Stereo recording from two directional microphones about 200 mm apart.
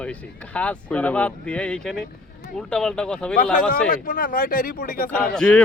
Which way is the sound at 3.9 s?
45° left (ahead or behind).